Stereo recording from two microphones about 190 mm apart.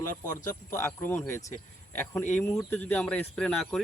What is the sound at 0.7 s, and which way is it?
Speech, 15° left (ahead or behind).